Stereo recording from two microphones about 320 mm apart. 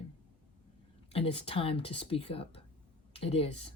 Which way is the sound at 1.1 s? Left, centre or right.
Centre.